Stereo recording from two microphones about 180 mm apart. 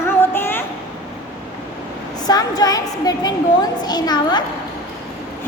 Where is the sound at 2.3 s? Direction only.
20° left (ahead or behind).